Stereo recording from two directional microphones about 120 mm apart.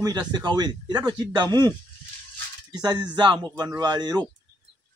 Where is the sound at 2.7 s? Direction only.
35° right (ahead or behind).